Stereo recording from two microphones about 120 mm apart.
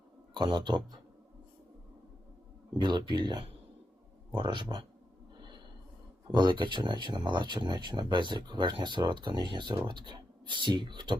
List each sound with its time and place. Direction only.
0.3 s speech: 40° right (ahead or behind)
2.7 s speech: 35° right (ahead or behind)
6.3 s speech: 40° right (ahead or behind)